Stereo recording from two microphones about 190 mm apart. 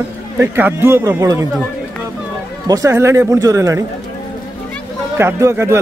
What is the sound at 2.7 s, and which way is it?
A man's voice, 15° right (ahead or behind).